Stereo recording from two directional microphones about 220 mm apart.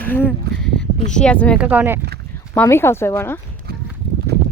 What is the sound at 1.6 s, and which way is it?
Speech, 5° right (ahead or behind).